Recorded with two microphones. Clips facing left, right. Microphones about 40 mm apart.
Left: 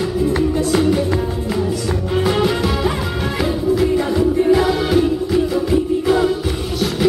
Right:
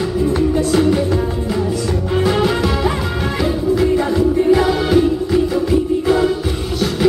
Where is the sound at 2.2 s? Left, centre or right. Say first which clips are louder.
Right 1 dB; centre.